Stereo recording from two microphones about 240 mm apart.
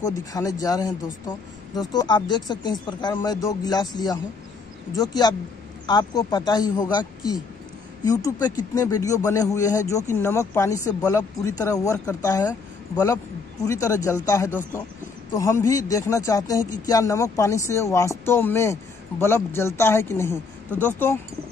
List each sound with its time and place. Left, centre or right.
0.0 s speech: centre
15.6 s speech: centre